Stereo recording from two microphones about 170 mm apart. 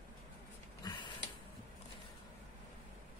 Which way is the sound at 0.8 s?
25° left (ahead or behind).